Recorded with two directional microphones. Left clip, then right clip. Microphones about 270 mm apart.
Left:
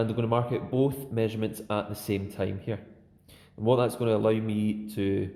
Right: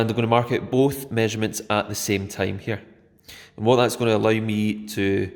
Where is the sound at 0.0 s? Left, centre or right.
Right.